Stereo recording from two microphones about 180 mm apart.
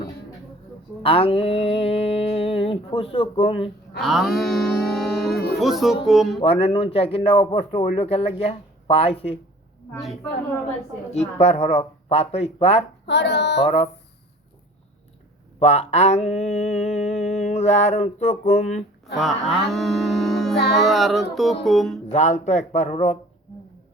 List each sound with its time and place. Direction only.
1.0 s mantra: 30° left (ahead or behind)
3.9 s cattle: centre (ahead or behind)
5.5 s speech: centre (ahead or behind)
6.4 s mantra: 35° left (ahead or behind)
8.4 s speech: 35° left (ahead or behind)
11.1 s mantra: 35° left (ahead or behind)
13.1 s speech: 70° left (ahead or behind)
13.7 s mantra: 35° left (ahead or behind)
15.5 s mantra: 35° left (ahead or behind)
19.1 s speech: centre (ahead or behind)
20.6 s speech: 70° left (ahead or behind)
20.8 s speech: centre (ahead or behind)
22.1 s mantra: 40° left (ahead or behind)